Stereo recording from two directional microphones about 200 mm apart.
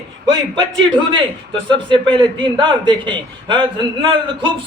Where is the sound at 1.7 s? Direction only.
25° right (ahead or behind).